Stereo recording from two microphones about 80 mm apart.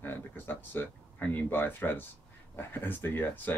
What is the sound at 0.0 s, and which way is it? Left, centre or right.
Speech, left.